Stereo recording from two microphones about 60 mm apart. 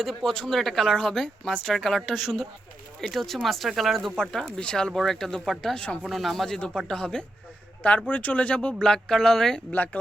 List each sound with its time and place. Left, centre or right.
0.0 s speech: centre
4.2 s speech: centre
9.7 s speech: left